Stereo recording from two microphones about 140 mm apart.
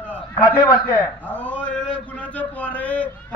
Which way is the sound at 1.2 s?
10° left (ahead or behind).